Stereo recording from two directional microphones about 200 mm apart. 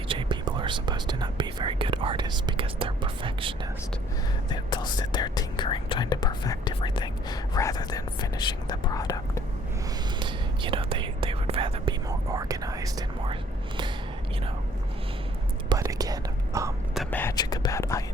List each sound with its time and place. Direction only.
0.1 s whispering: 25° right (ahead or behind)
4.4 s whispering: 20° left (ahead or behind)
10.2 s whispering: 25° right (ahead or behind)
15.7 s whispering: 20° right (ahead or behind)
16.9 s whispering: 5° left (ahead or behind)
17.3 s a sound: 20° left (ahead or behind)